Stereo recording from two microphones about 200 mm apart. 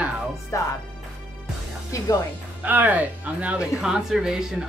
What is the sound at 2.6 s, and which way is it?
Speech, 10° right (ahead or behind).